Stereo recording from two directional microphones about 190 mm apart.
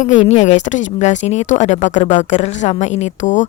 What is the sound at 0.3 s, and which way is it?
A woman's voice, 35° left (ahead or behind).